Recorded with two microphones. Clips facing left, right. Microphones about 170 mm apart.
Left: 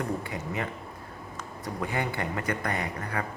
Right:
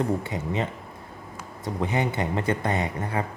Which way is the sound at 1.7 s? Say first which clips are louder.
Right 5 dB; 20° right (ahead or behind).